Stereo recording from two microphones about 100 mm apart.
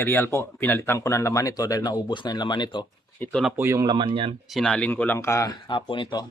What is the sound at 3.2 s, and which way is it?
Speech, 20° left (ahead or behind).